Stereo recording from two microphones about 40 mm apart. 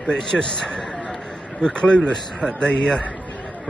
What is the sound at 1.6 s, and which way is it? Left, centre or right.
Speech, left.